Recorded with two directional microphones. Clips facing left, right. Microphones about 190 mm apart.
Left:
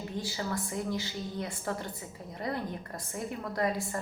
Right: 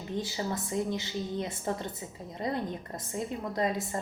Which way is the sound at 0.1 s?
20° right (ahead or behind).